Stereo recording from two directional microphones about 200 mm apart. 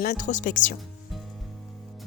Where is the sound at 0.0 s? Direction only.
40° left (ahead or behind).